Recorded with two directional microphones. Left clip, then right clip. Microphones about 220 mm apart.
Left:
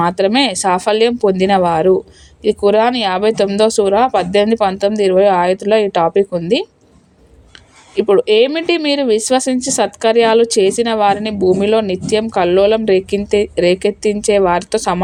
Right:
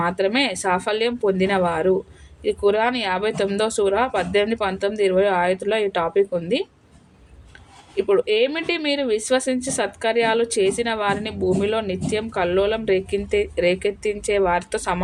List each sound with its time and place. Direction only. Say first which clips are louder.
0.0 s speech: left 7 dB; 35° left (ahead or behind)
7.9 s speech: left 8 dB; 35° left (ahead or behind)